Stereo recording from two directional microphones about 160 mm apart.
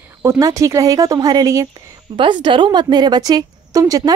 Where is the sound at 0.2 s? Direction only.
20° right (ahead or behind).